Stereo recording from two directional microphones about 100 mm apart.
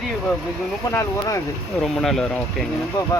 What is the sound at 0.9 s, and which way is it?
Speech, 30° left (ahead or behind).